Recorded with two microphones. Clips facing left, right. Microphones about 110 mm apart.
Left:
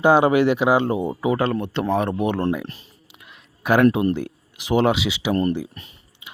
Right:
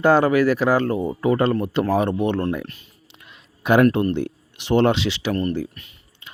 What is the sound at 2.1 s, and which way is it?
Speech, 10° left (ahead or behind).